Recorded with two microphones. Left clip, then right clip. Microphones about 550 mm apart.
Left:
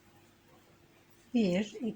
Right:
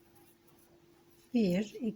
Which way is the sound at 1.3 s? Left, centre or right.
Right.